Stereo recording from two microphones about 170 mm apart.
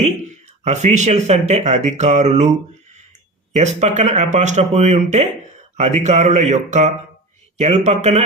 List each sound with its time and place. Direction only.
0.6 s speech: 40° right (ahead or behind)
3.6 s speech: 40° right (ahead or behind)